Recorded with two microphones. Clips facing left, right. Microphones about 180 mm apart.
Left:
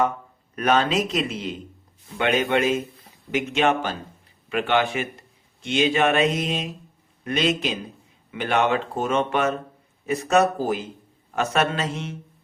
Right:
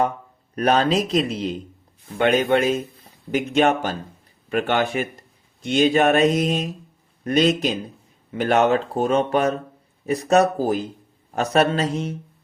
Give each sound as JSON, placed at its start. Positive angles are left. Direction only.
{"t": 0.5, "sound": "speech", "side_deg": -35}